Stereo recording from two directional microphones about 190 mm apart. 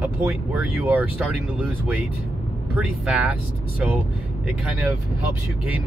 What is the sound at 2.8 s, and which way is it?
Speech, 5° right (ahead or behind).